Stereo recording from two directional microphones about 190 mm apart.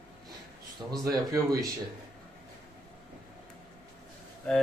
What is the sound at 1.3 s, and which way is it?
Speech, 15° right (ahead or behind).